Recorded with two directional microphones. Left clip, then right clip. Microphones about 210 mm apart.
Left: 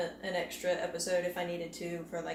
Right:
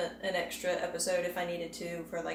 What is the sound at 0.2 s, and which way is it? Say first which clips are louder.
Speech: right 2 dB; centre (ahead or behind).